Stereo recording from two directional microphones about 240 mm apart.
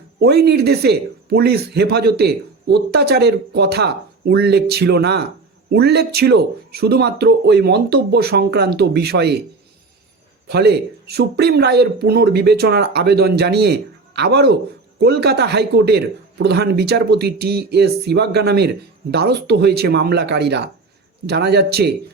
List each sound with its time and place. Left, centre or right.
0.2 s speech: right
10.5 s speech: right